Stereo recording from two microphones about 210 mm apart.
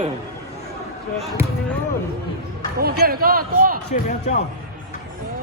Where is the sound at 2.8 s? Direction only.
45° right (ahead or behind).